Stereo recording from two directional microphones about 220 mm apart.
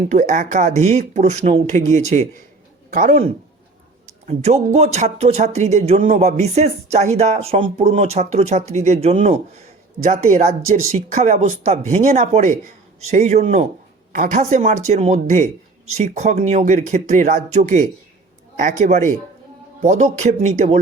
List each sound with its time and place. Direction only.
0.1 s speech: 35° right (ahead or behind)
4.3 s speech: 30° right (ahead or behind)